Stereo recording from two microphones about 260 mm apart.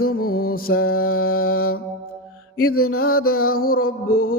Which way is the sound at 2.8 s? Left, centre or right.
Left.